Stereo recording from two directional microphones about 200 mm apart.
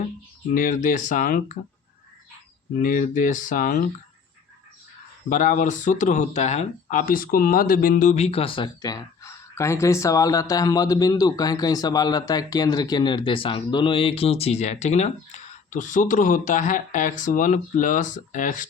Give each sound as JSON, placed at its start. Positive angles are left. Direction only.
{"t": 0.5, "sound": "speech", "side_deg": 40}
{"t": 2.7, "sound": "speech", "side_deg": 40}
{"t": 5.3, "sound": "speech", "side_deg": 40}